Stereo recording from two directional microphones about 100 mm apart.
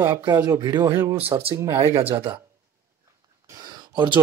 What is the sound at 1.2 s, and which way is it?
Speech, 70° right (ahead or behind).